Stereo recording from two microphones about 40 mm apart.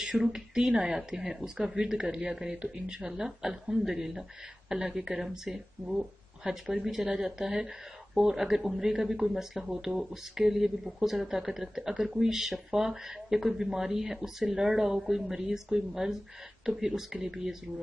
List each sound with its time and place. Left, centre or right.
0.1 s speech: centre